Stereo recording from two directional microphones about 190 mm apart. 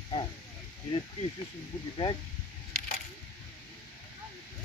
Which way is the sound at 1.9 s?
25° left (ahead or behind).